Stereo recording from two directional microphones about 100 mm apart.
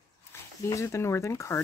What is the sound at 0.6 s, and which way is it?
Speech, 30° left (ahead or behind).